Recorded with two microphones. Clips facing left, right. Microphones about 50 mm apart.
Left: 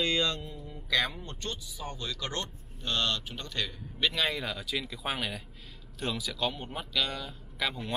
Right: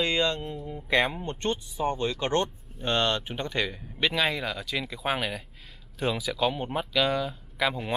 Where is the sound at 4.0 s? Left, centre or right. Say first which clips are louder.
Right 4 dB; centre.